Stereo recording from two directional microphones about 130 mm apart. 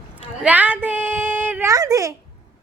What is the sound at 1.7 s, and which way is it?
Speech, 25° right (ahead or behind).